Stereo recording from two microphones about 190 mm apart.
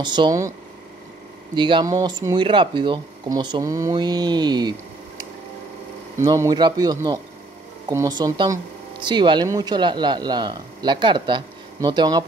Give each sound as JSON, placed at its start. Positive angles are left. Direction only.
{"t": 0.0, "sound": "speech", "side_deg": -25}
{"t": 1.5, "sound": "speech", "side_deg": -25}
{"t": 6.1, "sound": "speech", "side_deg": -15}